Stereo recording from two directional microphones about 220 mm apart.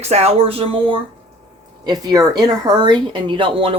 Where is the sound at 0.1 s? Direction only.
30° right (ahead or behind).